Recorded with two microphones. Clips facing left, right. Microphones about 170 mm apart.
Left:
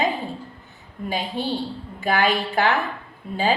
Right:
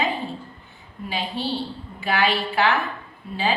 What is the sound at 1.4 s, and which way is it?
A woman's voice, 50° left (ahead or behind).